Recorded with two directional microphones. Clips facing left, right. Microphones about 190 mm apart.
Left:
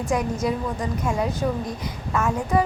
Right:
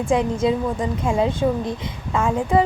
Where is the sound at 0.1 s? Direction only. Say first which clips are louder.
Right 5 dB; 25° right (ahead or behind).